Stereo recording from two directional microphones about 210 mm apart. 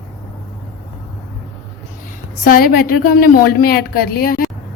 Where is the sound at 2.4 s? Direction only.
45° left (ahead or behind).